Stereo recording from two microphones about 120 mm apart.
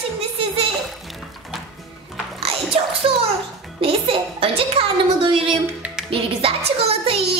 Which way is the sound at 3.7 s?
50° right (ahead or behind).